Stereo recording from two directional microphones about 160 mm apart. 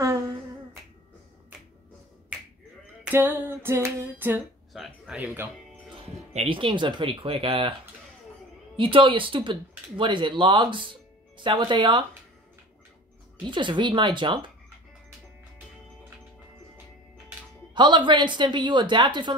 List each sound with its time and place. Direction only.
3.0 s female singing: 10° right (ahead or behind)
4.7 s female singing: centre (ahead or behind)
6.0 s speech: 35° right (ahead or behind)
8.7 s a woman's voice: 30° right (ahead or behind)
13.5 s a woman's voice: 30° right (ahead or behind)
17.7 s a woman's voice: 30° right (ahead or behind)